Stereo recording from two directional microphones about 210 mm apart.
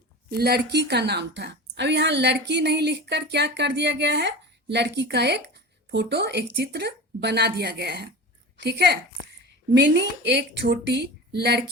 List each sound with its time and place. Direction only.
0.3 s a woman's voice: 50° right (ahead or behind)